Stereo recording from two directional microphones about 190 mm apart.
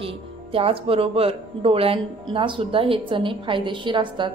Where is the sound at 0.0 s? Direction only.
30° right (ahead or behind).